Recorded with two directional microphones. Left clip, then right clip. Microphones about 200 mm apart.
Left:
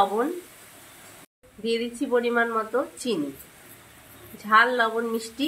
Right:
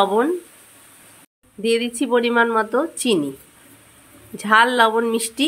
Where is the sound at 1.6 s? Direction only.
50° right (ahead or behind).